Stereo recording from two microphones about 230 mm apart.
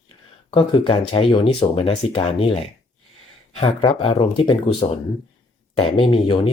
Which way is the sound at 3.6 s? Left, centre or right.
Left.